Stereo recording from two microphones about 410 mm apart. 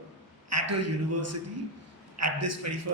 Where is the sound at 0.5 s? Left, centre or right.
Right.